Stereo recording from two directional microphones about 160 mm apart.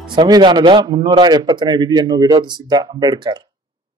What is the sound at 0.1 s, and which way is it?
Speech, 30° right (ahead or behind).